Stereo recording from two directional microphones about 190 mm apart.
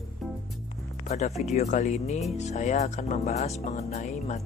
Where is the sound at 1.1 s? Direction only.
35° left (ahead or behind).